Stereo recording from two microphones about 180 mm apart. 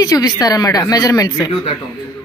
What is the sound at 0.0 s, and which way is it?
Speech, 20° left (ahead or behind).